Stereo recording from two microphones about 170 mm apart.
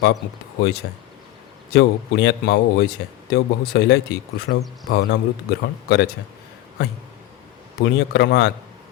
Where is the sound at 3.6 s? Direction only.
65° left (ahead or behind).